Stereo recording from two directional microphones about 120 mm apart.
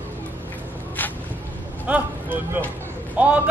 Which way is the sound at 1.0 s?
15° left (ahead or behind).